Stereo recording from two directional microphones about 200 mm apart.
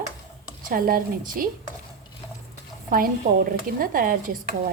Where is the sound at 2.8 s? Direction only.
45° right (ahead or behind).